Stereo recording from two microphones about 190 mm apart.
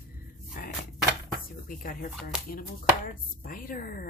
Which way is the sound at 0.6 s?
45° left (ahead or behind).